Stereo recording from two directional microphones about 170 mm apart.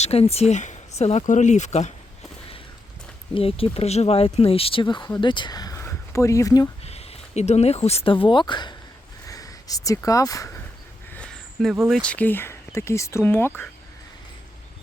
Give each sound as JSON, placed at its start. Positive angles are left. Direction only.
{"t": 0.0, "sound": "speech", "side_deg": 35}
{"t": 3.3, "sound": "speech", "side_deg": 35}
{"t": 6.8, "sound": "speech", "side_deg": 35}
{"t": 11.1, "sound": "a sound", "side_deg": 5}
{"t": 11.9, "sound": "speech", "side_deg": 5}